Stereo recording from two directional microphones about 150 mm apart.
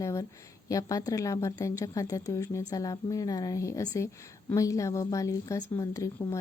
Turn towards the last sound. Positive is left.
turn(degrees=20)  # may be behind; listen again after turning